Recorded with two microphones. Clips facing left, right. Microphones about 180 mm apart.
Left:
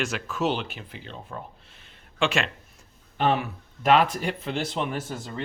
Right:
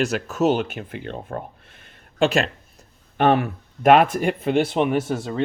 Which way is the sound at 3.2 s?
50° right (ahead or behind).